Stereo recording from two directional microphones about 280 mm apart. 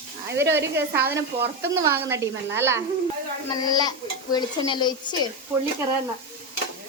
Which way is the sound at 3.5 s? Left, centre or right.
Centre.